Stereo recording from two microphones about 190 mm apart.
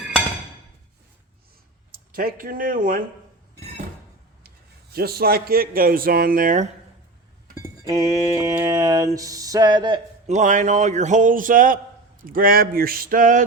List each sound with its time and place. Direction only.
2.1 s speech: 50° right (ahead or behind)
4.4 s a man's voice: 55° right (ahead or behind)
7.9 s a sound: 15° right (ahead or behind)
10.2 s speech: 40° right (ahead or behind)